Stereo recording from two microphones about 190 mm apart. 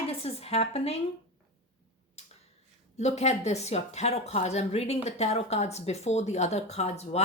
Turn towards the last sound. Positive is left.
turn(degrees=35)  # may be behind; listen again after turning